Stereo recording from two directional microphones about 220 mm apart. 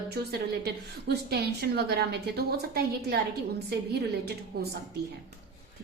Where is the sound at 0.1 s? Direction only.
50° right (ahead or behind).